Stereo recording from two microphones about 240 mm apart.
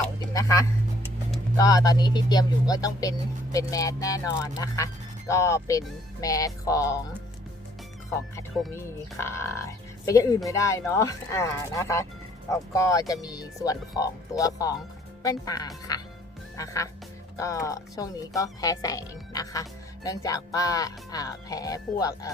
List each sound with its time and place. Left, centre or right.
0.3 s speech: centre
8.7 s speech: centre